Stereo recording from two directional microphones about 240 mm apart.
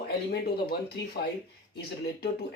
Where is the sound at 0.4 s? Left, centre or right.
Left.